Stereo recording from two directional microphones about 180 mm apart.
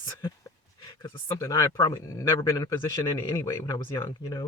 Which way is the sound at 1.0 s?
20° left (ahead or behind).